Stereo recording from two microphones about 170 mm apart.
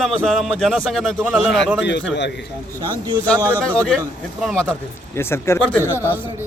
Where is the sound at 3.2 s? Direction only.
10° left (ahead or behind).